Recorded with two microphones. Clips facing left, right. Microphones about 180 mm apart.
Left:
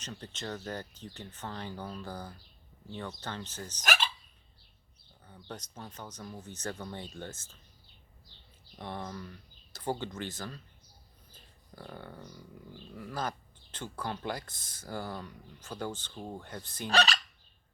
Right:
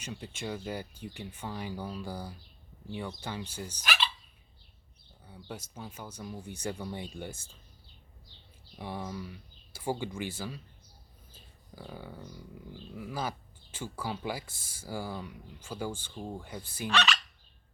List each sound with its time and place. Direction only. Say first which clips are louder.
0.0 s speech: right 2 dB; 10° right (ahead or behind)
3.8 s hiccup: left 2 dB; 45° left (ahead or behind)
5.2 s speech: right 1 dB; 10° right (ahead or behind)
8.8 s speech: right 2 dB; 10° right (ahead or behind)
11.3 s a sound: right 1 dB; 5° right (ahead or behind)
12.9 s speech: right 1 dB; 10° right (ahead or behind)
16.1 s speech: right 2 dB; 5° left (ahead or behind)
16.4 s speech: right 2 dB; 10° right (ahead or behind)
16.9 s fowl: left 2 dB; 35° left (ahead or behind)